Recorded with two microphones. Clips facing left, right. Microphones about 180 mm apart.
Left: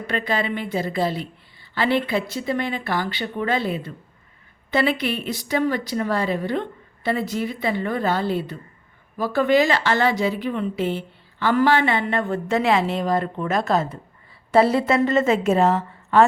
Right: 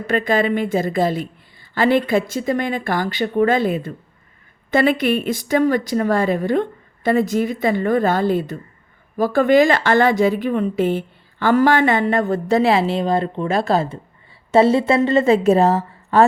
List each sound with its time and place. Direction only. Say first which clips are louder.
0.1 s a woman's voice: right 7 dB; 45° right (ahead or behind)